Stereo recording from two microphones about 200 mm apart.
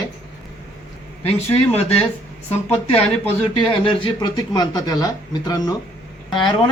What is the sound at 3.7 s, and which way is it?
Speech, 25° left (ahead or behind).